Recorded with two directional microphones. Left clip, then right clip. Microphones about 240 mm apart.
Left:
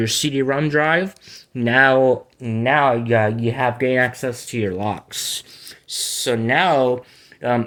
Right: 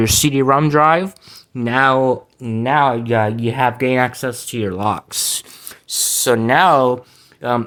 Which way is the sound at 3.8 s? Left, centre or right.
Right.